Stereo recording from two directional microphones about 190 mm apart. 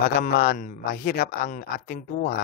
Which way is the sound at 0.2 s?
45° left (ahead or behind).